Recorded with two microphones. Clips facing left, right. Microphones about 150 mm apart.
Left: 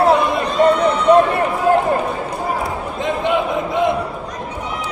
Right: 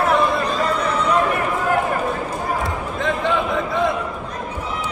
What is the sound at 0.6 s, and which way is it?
Run, 30° left (ahead or behind).